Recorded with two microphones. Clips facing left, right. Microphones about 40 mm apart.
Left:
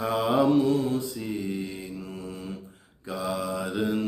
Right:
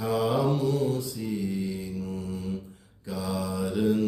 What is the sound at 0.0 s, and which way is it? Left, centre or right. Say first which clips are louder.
Mantra: left 2 dB; left.